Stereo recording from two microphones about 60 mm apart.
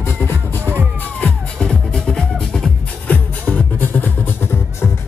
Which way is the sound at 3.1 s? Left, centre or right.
Left.